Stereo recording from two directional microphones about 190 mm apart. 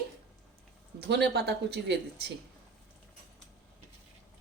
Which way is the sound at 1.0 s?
60° right (ahead or behind).